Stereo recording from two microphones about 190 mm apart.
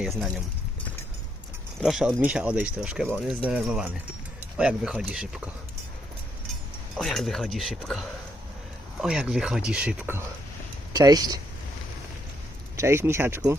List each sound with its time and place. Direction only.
0.0 s speech: centre (ahead or behind)
1.8 s speech: centre (ahead or behind)
6.9 s speech: centre (ahead or behind)
10.9 s speech: 20° right (ahead or behind)
12.7 s speech: 15° right (ahead or behind)